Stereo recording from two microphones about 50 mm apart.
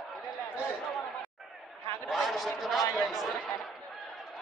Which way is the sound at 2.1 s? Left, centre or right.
Centre.